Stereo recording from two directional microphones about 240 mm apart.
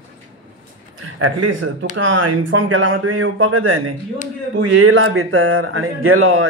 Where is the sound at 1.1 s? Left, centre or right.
Right.